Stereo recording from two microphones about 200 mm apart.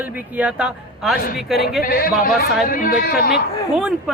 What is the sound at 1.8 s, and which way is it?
Speech, 45° left (ahead or behind).